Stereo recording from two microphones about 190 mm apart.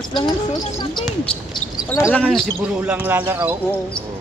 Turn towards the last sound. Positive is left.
turn(degrees=-10)  # may be behind; listen again after turning